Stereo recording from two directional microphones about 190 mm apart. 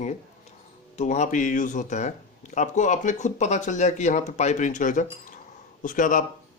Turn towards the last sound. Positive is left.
turn(degrees=45)  # may be behind; listen again after turning